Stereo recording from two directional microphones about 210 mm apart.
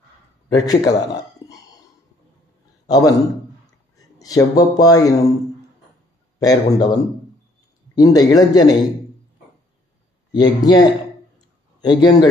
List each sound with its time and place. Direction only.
0.5 s a sound: 15° left (ahead or behind)
2.9 s a man's voice: 15° left (ahead or behind)
6.4 s speech: 15° left (ahead or behind)
10.3 s speech: 20° left (ahead or behind)